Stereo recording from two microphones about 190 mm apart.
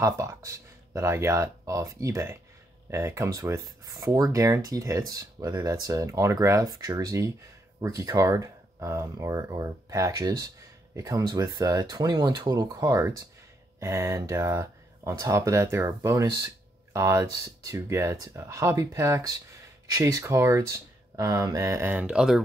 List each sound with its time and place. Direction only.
0.0 s speech: 15° right (ahead or behind)